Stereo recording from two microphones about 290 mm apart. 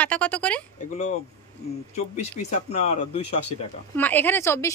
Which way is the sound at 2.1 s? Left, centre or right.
Left.